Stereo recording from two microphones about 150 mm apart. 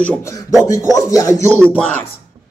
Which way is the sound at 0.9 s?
25° left (ahead or behind).